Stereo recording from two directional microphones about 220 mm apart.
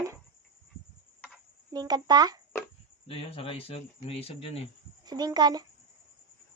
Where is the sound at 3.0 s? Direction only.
25° left (ahead or behind).